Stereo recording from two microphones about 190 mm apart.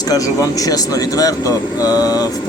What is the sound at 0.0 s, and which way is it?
Speech, 20° left (ahead or behind).